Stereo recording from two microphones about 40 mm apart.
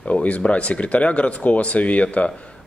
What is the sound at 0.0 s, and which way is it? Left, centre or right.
Speech, left.